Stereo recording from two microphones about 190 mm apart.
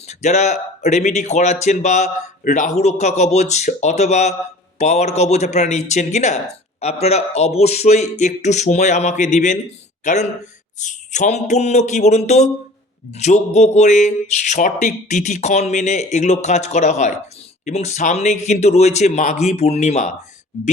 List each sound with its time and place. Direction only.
0.1 s speech: 35° left (ahead or behind)